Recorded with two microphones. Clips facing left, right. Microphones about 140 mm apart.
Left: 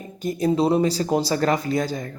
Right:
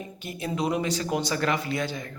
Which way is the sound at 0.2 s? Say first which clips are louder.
Left 10 dB; 40° left (ahead or behind).